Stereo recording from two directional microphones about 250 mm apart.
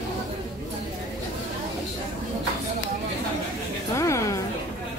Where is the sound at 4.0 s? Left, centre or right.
Centre.